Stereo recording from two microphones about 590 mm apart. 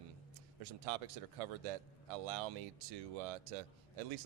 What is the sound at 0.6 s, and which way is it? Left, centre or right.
A man's voice, right.